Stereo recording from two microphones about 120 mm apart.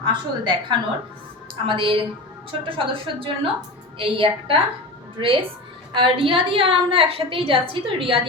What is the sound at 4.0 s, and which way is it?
A woman's voice, 45° right (ahead or behind).